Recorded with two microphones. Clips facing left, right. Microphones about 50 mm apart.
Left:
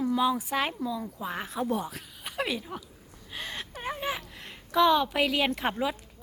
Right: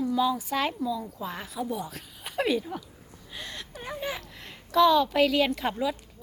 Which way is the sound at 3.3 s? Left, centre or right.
Left.